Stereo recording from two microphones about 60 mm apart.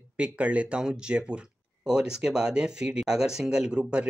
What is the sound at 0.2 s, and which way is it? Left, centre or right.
Speech, right.